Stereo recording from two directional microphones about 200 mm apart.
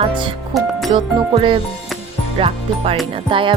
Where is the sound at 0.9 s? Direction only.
25° right (ahead or behind).